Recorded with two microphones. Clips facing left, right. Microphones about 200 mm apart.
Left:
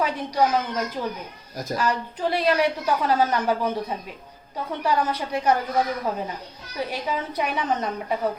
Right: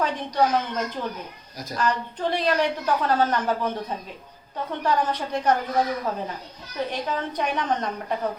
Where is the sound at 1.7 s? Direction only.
10° left (ahead or behind).